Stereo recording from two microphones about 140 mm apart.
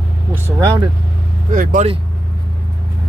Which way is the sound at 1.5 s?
65° right (ahead or behind).